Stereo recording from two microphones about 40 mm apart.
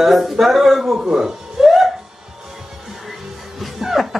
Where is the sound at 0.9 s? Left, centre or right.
Centre.